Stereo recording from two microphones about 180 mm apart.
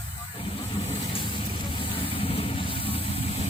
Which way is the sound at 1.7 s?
30° left (ahead or behind).